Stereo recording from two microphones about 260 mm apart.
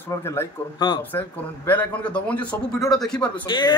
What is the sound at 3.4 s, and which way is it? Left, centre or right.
Speech, centre.